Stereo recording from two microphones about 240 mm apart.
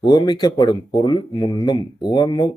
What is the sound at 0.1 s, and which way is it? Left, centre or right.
Speech, centre.